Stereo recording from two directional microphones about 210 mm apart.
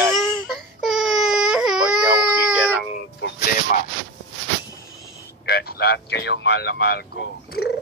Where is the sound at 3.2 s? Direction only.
55° left (ahead or behind).